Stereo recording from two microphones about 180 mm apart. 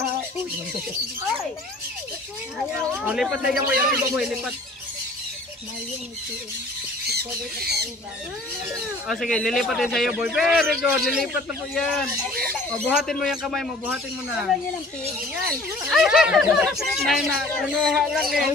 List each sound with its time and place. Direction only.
3.1 s speech: 5° right (ahead or behind)
7.1 s speech: 60° right (ahead or behind)
9.0 s speech: centre (ahead or behind)
15.0 s speech: 5° right (ahead or behind)